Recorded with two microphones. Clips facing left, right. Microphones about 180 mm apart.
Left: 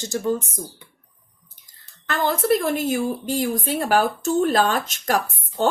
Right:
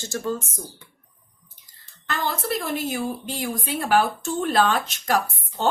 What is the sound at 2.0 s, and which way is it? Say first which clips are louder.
A woman's voice: left 7 dB; 50° left (ahead or behind).